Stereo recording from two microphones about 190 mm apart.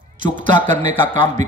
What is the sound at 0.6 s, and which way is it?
Speech, 10° left (ahead or behind).